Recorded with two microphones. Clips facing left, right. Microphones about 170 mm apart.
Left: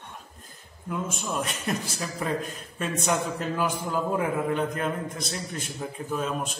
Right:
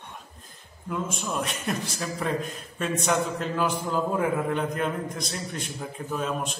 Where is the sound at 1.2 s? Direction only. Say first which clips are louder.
Even; centre (ahead or behind).